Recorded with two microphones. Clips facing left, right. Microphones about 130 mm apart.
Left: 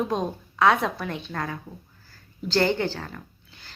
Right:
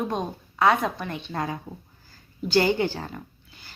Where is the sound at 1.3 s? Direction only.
20° right (ahead or behind).